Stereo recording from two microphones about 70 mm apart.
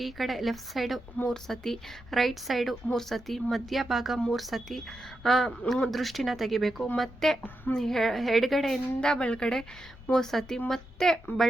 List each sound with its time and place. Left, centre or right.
0.0 s a woman's voice: centre
9.0 s a woman's voice: centre